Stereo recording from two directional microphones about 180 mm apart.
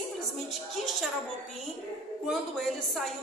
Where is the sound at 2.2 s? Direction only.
Centre (ahead or behind).